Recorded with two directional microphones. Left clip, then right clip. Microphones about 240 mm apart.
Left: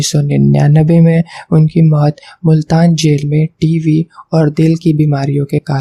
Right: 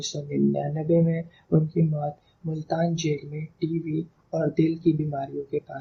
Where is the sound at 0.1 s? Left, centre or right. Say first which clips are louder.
Left 12 dB; left.